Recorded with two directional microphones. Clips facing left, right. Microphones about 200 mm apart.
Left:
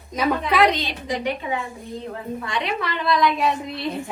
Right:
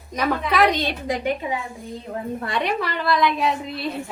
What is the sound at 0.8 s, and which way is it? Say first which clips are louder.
Speech: right 2 dB; 55° right (ahead or behind).